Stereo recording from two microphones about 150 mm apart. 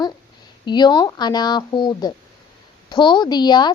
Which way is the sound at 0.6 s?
30° left (ahead or behind).